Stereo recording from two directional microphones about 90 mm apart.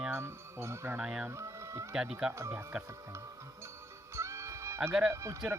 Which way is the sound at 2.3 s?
30° right (ahead or behind).